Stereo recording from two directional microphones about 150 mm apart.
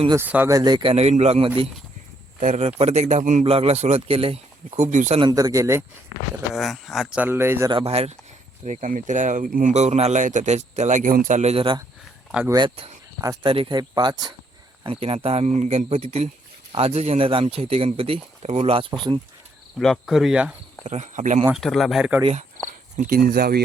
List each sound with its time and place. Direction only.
0.2 s speech: 15° right (ahead or behind)
0.5 s a man's voice: 25° right (ahead or behind)
4.8 s a man's voice: 50° right (ahead or behind)
5.2 s speech: 25° right (ahead or behind)
6.5 s speech: centre (ahead or behind); by 7.7 s 15° right (ahead or behind)
7.7 s speech: 40° right (ahead or behind)
8.6 s speech: 55° right (ahead or behind)
9.7 s a man's voice: 45° right (ahead or behind); by 14.3 s 30° right (ahead or behind)
14.8 s a man's voice: 40° right (ahead or behind)
19.8 s speech: centre (ahead or behind)
20.8 s a man's voice: 50° right (ahead or behind)
21.5 s speech: centre (ahead or behind)
23.0 s speech: 80° right